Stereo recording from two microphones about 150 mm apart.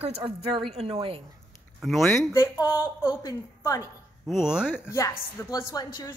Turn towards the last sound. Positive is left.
turn(degrees=25)  # may be behind; listen again after turning